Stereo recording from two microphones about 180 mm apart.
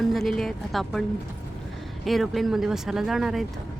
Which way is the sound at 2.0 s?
Centre (ahead or behind).